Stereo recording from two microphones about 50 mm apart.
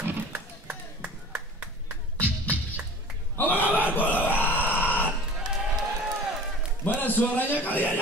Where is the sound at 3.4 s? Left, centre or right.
Left.